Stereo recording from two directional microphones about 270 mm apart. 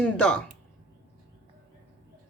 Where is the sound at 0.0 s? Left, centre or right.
Centre.